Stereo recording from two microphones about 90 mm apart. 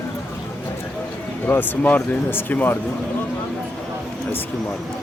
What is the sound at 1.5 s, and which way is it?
Speech, 20° left (ahead or behind).